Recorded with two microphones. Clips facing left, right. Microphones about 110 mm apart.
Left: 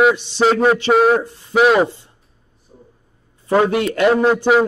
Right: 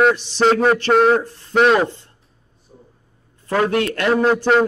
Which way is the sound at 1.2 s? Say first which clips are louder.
Left 1 dB; 10° left (ahead or behind).